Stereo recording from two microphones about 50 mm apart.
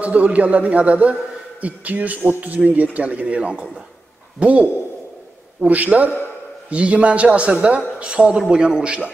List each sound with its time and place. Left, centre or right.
0.0 s a man's voice: right